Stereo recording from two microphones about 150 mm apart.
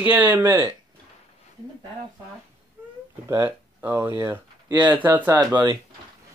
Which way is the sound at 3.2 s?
15° right (ahead or behind).